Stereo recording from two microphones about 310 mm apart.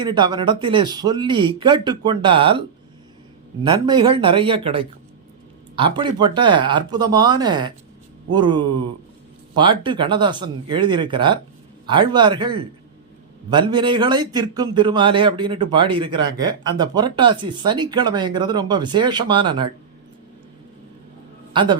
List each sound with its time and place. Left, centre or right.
0.0 s speech: centre
3.6 s speech: centre
21.5 s a man's voice: centre